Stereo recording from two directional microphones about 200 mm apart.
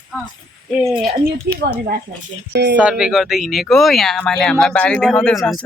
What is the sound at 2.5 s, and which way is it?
Speech, 60° right (ahead or behind).